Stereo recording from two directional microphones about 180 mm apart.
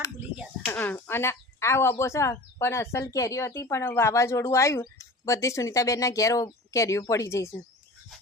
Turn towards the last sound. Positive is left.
turn(degrees=15)  # may be behind; listen again after turning